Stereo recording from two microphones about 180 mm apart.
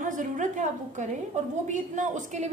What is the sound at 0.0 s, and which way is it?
A woman's voice, 45° right (ahead or behind).